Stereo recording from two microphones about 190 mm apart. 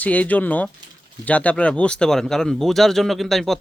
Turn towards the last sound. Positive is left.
turn(degrees=0)  # may be behind; listen again after turning